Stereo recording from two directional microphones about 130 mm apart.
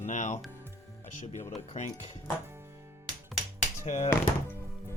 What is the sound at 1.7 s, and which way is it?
Speech, 55° left (ahead or behind).